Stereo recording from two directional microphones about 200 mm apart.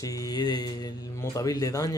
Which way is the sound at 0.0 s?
15° left (ahead or behind).